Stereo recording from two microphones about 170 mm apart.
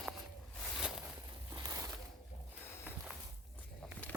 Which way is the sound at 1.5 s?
20° right (ahead or behind).